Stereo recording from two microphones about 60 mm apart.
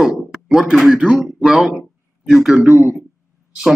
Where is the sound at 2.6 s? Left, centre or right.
Right.